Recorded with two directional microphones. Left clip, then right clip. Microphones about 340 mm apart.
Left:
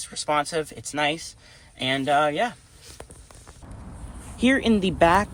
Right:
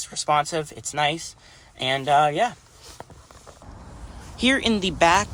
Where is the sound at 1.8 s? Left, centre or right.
Centre.